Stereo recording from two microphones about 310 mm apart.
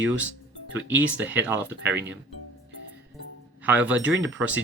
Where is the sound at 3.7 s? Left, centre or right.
Centre.